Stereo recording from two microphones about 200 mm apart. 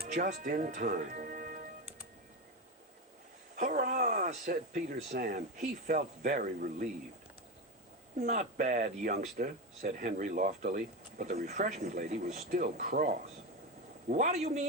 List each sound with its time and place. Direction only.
0.1 s speech: 40° right (ahead or behind)
3.5 s a sound: 45° right (ahead or behind)
5.1 s speech: 40° right (ahead or behind)
8.1 s speech: 40° right (ahead or behind)